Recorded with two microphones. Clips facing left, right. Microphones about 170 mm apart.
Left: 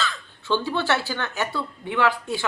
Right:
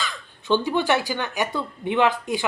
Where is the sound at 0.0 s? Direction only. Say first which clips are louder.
Left 3 dB; 15° right (ahead or behind).